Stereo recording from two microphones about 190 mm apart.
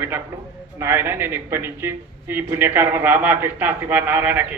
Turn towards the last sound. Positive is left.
turn(degrees=-10)  # may be behind; listen again after turning